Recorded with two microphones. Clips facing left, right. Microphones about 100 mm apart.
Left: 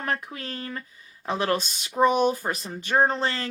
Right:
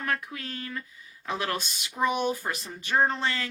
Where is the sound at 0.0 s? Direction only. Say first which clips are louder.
Left 2 dB; 30° left (ahead or behind).